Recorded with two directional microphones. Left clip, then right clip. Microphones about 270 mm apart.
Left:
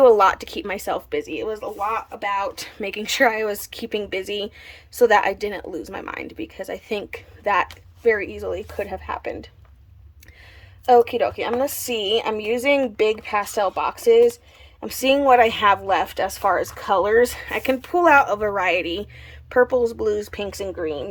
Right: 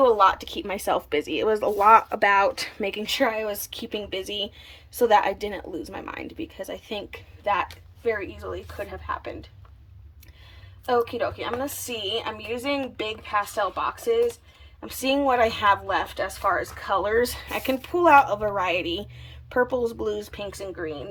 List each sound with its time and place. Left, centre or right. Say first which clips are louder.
0.0 s speech: left 4 dB; centre
10.8 s speech: left 8 dB; centre